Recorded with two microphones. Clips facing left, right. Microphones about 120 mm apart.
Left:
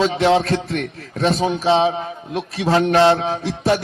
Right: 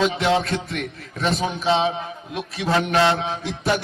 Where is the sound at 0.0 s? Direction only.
35° left (ahead or behind).